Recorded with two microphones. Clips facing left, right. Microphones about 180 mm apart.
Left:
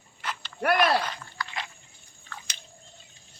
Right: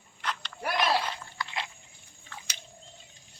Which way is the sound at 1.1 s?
25° right (ahead or behind).